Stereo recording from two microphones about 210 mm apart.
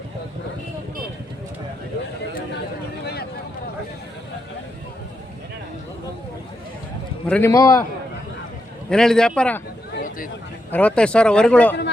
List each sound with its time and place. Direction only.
7.3 s speech: 5° left (ahead or behind)
7.5 s a man's voice: 15° left (ahead or behind)
8.9 s speech: 5° left (ahead or behind)
10.7 s speech: 5° left (ahead or behind)